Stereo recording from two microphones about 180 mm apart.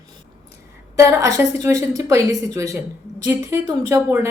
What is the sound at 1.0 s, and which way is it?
Speech, 15° right (ahead or behind).